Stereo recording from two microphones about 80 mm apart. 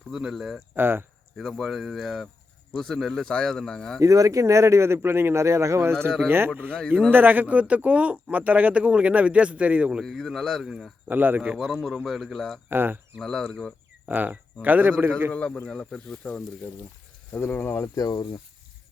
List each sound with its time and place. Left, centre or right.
0.1 s speech: centre
0.8 s speech: right
1.4 s a man's voice: centre
4.0 s speech: right; by 10.0 s centre
10.0 s speech: centre
11.1 s speech: right
11.5 s speech: centre
12.6 s speech: right
13.1 s speech: centre
14.1 s speech: right
15.3 s a man's voice: centre
17.3 s speech: left
17.8 s speech: left